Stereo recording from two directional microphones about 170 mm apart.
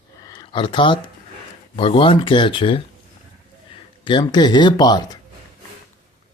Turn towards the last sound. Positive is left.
turn(degrees=25)  # may be behind; listen again after turning